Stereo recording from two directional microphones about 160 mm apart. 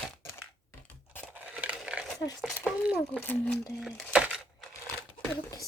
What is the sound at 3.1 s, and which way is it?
Speech, 10° left (ahead or behind).